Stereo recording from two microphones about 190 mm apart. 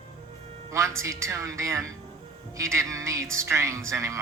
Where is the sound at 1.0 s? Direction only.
15° right (ahead or behind).